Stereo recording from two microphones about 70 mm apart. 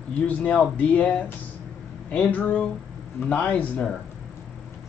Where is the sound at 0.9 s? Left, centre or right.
Centre.